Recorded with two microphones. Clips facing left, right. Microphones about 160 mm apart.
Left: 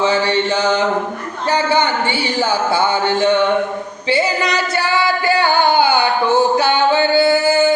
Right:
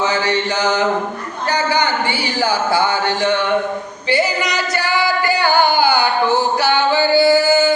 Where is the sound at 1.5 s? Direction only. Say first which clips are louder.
Left 2 dB; 25° left (ahead or behind).